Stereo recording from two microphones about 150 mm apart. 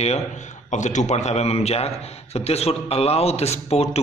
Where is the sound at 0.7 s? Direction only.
55° left (ahead or behind).